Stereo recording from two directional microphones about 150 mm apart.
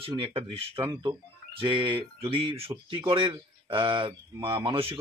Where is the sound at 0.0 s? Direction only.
40° right (ahead or behind).